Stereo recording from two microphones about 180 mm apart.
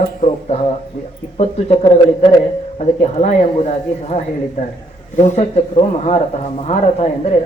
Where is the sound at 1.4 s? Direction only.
30° left (ahead or behind).